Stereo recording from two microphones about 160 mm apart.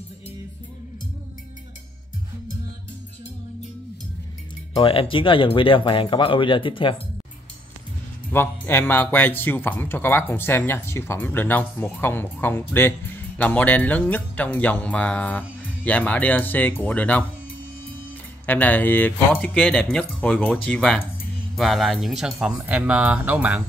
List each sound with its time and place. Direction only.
4.7 s speech: 35° left (ahead or behind)
8.3 s speech: 15° left (ahead or behind)
18.4 s speech: 10° left (ahead or behind); by 23.6 s 10° right (ahead or behind)